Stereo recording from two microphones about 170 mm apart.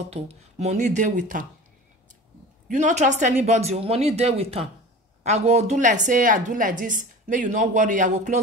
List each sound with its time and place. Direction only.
0.1 s a woman's voice: 40° right (ahead or behind)
2.7 s a woman's voice: 45° right (ahead or behind)